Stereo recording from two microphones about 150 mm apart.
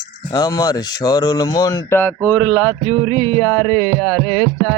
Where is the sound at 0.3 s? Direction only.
25° left (ahead or behind).